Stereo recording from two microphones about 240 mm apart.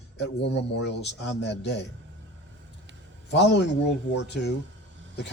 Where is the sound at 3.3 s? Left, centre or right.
Left.